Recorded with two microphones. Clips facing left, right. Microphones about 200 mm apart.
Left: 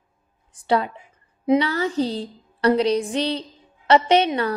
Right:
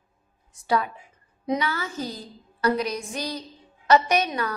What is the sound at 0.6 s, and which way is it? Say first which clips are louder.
A woman's voice: left 4 dB; 30° left (ahead or behind).